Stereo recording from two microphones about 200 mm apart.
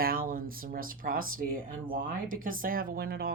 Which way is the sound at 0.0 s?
45° right (ahead or behind).